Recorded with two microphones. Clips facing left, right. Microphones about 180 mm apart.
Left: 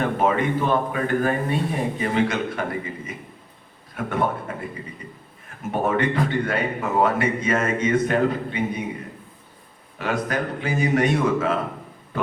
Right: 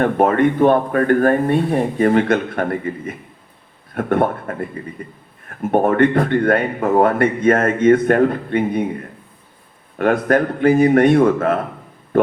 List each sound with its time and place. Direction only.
0.0 s a man's voice: 55° right (ahead or behind)
10.0 s speech: 55° right (ahead or behind)
12.1 s a sound: 55° right (ahead or behind)